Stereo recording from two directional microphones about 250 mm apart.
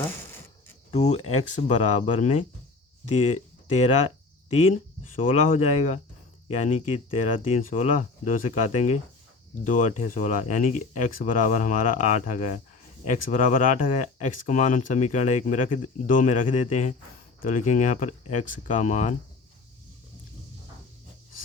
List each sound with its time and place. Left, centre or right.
0.9 s speech: left